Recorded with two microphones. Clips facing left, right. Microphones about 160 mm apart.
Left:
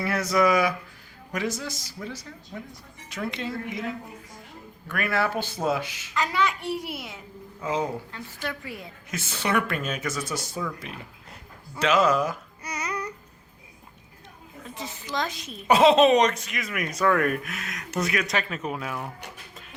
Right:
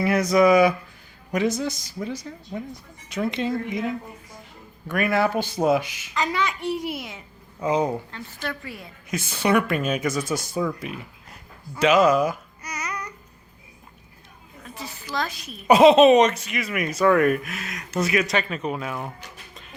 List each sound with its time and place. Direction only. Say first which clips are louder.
0.0 s speech: right 5 dB; 15° right (ahead or behind)
4.9 s speech: right 5 dB; 20° right (ahead or behind)
8.1 s a woman's voice: right 2 dB; 15° left (ahead or behind)
9.0 s speech: right 6 dB; 15° right (ahead or behind)
11.8 s speech: right 4 dB; 10° right (ahead or behind)
12.6 s babbling: left 1 dB; 30° left (ahead or behind)
14.8 s a woman's voice: right 1 dB; 20° left (ahead or behind)
15.6 s speech: right 4 dB; 10° right (ahead or behind)